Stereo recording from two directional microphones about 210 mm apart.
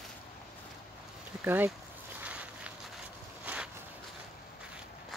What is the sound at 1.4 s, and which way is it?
Speech, 10° right (ahead or behind).